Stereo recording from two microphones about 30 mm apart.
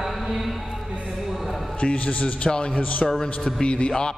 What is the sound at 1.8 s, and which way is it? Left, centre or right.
A man's voice, left.